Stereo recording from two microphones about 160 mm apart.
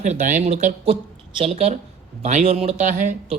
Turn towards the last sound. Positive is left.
turn(degrees=-50)  # may be behind; listen again after turning